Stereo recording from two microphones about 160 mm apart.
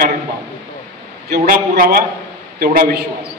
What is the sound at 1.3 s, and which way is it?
A man's voice, 80° right.